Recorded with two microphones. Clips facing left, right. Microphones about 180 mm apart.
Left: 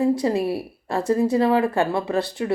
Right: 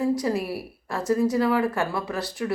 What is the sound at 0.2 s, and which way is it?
Speech, 25° left (ahead or behind).